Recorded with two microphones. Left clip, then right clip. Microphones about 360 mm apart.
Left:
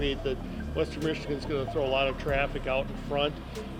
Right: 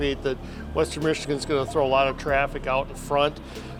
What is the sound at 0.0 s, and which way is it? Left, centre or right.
Speech, right.